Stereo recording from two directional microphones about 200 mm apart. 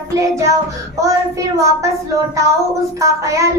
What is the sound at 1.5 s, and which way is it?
Child singing, 15° right (ahead or behind).